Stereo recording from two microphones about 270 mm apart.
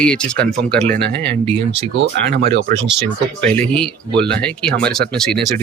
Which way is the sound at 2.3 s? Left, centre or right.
Right.